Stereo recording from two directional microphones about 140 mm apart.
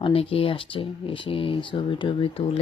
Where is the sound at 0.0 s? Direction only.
40° left (ahead or behind).